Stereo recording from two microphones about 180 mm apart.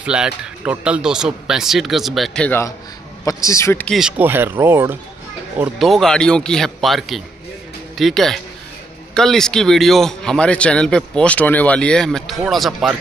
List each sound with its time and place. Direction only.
0.0 s speech: 5° right (ahead or behind)
4.2 s speech: 10° right (ahead or behind)
5.6 s speech: centre (ahead or behind)